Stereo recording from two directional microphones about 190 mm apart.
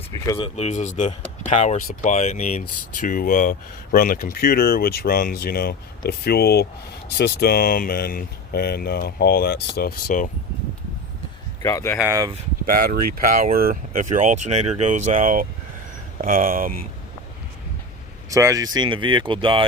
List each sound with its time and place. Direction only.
0.3 s speech: 30° left (ahead or behind); by 10.2 s 45° left (ahead or behind)
11.6 s speech: 15° left (ahead or behind)
11.9 s speech: 15° right (ahead or behind)
12.6 s speech: 50° right (ahead or behind)
18.3 s speech: 15° right (ahead or behind)